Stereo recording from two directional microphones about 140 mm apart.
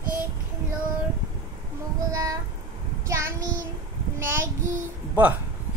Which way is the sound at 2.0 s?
25° right (ahead or behind).